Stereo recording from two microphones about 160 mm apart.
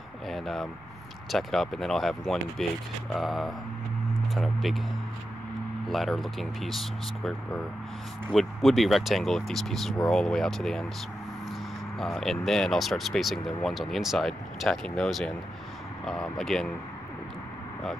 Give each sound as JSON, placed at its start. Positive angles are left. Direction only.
{"t": 0.3, "sound": "vehicle", "side_deg": 0}
{"t": 1.3, "sound": "speech", "side_deg": 0}
{"t": 5.9, "sound": "speech", "side_deg": 0}
{"t": 12.0, "sound": "speech", "side_deg": 0}